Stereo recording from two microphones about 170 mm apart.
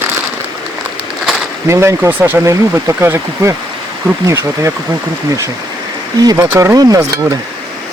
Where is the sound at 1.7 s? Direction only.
15° right (ahead or behind).